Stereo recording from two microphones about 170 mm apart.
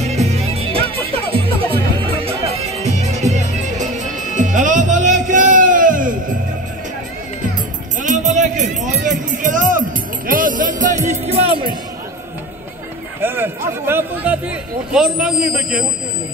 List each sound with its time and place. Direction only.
0.0 s music: 40° right (ahead or behind)
8.0 s music: 45° right (ahead or behind)
13.2 s speech: 10° right (ahead or behind)